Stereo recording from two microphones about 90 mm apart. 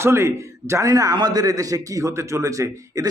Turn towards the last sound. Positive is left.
turn(degrees=-40)  # may be behind; listen again after turning